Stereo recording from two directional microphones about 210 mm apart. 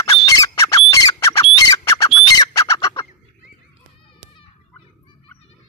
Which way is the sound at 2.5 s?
15° left (ahead or behind).